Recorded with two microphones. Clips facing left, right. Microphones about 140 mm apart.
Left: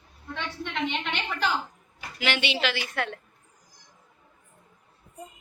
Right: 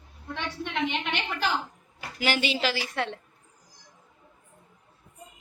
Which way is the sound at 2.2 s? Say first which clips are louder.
Right 1 dB; 40° right (ahead or behind).